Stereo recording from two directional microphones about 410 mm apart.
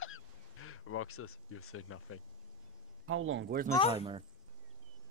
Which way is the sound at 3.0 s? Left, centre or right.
Right.